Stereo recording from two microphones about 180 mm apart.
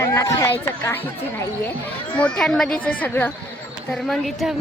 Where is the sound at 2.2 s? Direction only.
5° left (ahead or behind).